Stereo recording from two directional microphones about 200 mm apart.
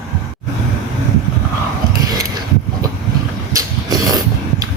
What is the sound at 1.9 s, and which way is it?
Mechanisms, 20° right (ahead or behind).